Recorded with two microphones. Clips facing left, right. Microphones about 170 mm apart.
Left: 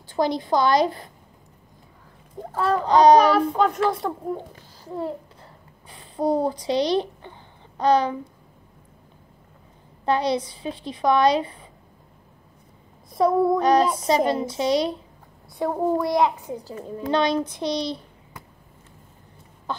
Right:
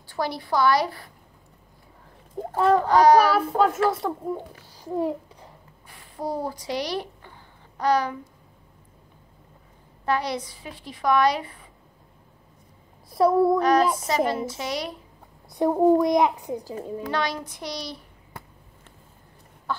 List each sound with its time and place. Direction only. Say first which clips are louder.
0.1 s a woman's voice: left 5 dB; 20° left (ahead or behind)
2.9 s a woman's voice: left 4 dB; 20° left (ahead or behind)
3.3 s a child's voice: left 1 dB; 5° right (ahead or behind)
4.8 s babbling: right 3 dB; 15° right (ahead or behind)
5.9 s a child's voice: left 8 dB; 25° left (ahead or behind)
10.0 s a woman's voice: left 4 dB; 25° left (ahead or behind)
13.1 s a child's voice: even; centre (ahead or behind)
13.6 s a woman's voice: left 1 dB; 25° left (ahead or behind)
15.5 s a child's voice: right 4 dB; 15° right (ahead or behind)
17.0 s a woman's voice: left 8 dB; 25° left (ahead or behind)